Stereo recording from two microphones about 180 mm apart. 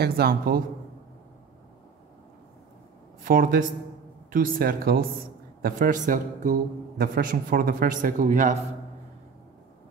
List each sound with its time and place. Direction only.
0.0 s speech: 60° right (ahead or behind)
3.3 s a man's voice: 50° right (ahead or behind)